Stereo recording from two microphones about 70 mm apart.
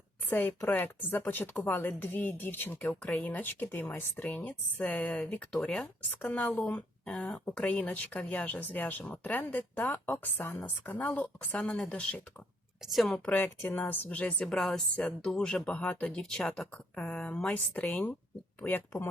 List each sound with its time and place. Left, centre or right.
0.3 s speech: left
12.8 s speech: centre
13.3 s speech: left
14.4 s speech: centre; by 18.8 s left